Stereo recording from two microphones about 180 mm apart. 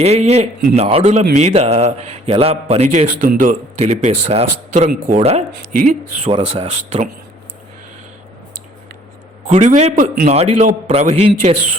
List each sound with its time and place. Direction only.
0.0 s a man's voice: 35° right (ahead or behind)
5.7 s speech: 45° right (ahead or behind)
6.3 s a man's voice: 35° right (ahead or behind)
9.5 s a man's voice: 40° right (ahead or behind)